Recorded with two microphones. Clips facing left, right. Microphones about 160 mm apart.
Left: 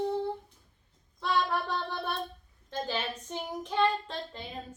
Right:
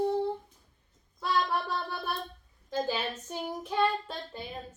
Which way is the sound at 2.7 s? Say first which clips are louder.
Right 3 dB; 10° right (ahead or behind).